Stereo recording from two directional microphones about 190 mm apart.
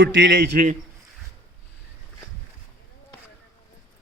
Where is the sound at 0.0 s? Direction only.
70° right (ahead or behind); by 0.8 s 45° right (ahead or behind).